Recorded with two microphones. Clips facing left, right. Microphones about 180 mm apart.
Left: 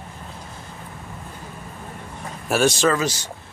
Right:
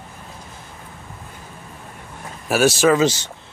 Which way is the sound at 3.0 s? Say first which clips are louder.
Right 7 dB; 25° right (ahead or behind).